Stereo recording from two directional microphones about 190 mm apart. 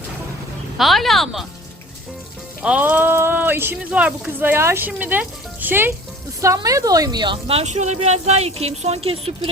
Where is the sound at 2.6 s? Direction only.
10° right (ahead or behind).